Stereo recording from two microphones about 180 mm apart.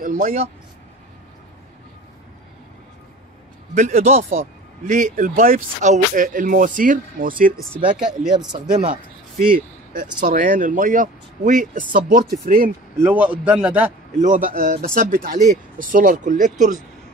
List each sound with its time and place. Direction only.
0.0 s speech: 50° right (ahead or behind)
3.7 s speech: 45° right (ahead or behind)
8.0 s speech: 5° right (ahead or behind)
8.3 s speech: 25° right (ahead or behind)
8.8 s speech: 50° right (ahead or behind)
13.0 s a man's voice: 10° right (ahead or behind)
14.2 s speech: 50° right (ahead or behind)